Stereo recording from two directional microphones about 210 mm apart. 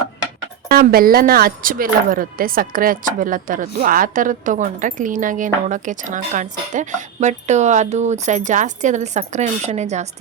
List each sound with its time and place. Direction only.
0.7 s speech: 45° right (ahead or behind)